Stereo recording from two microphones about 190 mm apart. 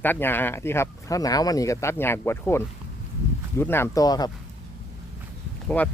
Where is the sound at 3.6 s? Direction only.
10° left (ahead or behind).